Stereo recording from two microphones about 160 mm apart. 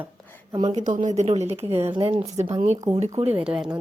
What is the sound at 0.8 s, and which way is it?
A woman's voice, 55° right (ahead or behind).